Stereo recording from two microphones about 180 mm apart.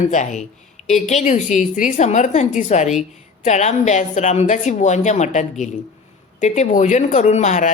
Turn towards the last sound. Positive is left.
turn(degrees=40)  # may be behind; listen again after turning